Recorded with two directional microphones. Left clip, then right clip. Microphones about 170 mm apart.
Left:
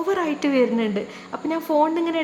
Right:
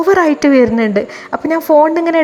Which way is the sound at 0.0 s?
35° right (ahead or behind).